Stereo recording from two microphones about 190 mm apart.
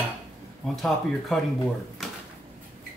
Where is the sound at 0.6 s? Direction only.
Centre (ahead or behind).